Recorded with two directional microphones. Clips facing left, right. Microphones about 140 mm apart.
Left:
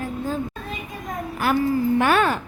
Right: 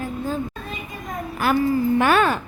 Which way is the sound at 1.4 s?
90° right.